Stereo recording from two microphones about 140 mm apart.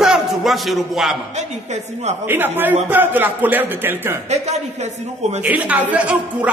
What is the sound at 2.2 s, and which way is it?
Speech, 15° right (ahead or behind).